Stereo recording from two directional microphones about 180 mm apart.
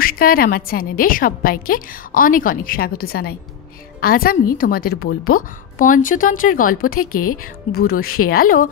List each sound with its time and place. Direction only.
0.0 s a woman's voice: 55° left (ahead or behind)